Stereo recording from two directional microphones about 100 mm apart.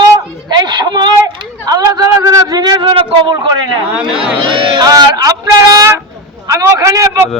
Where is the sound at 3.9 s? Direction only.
10° right (ahead or behind).